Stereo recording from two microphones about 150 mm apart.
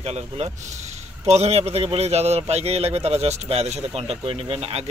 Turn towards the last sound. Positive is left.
turn(degrees=-40)  # may be behind; listen again after turning